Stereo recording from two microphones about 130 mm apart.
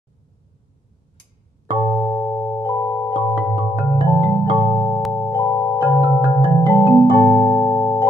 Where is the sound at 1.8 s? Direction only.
20° left (ahead or behind).